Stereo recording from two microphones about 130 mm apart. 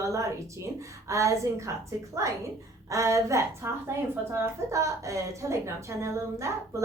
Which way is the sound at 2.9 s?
25° right (ahead or behind).